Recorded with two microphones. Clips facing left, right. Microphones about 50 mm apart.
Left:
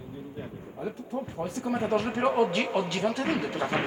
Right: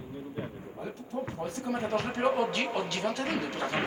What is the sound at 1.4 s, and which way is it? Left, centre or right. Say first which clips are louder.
A man's voice: left 5 dB; centre.